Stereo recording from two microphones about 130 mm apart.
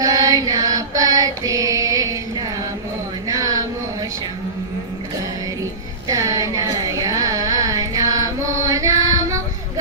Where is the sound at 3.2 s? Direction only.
30° right (ahead or behind).